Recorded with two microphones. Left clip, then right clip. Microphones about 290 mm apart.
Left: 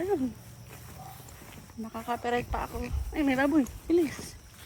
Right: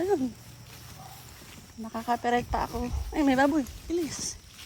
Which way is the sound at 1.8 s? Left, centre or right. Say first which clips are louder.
Right 4 dB; centre.